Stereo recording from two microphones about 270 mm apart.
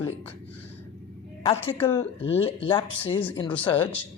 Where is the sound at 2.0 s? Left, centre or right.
Left.